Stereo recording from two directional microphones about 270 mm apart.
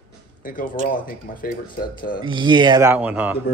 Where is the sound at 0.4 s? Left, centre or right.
Left.